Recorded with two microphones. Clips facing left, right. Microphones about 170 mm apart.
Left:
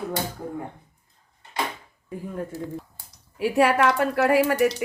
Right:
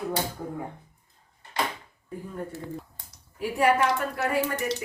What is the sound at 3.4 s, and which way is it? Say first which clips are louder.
Speech: left 3 dB; 80° left.